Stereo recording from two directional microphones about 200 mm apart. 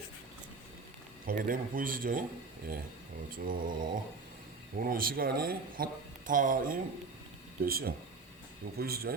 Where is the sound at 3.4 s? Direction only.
45° right (ahead or behind).